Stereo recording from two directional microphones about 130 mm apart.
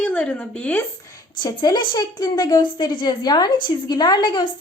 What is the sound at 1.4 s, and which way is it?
Speech, 35° left (ahead or behind).